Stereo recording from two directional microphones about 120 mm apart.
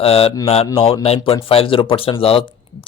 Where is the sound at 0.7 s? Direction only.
50° left (ahead or behind).